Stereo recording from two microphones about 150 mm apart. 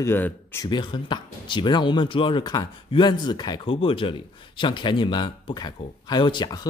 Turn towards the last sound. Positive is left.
turn(degrees=30)  # may be behind; listen again after turning